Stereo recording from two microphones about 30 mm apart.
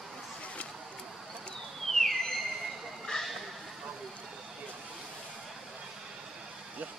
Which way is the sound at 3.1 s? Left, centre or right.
Left.